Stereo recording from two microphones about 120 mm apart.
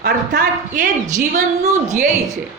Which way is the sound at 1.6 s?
80° right.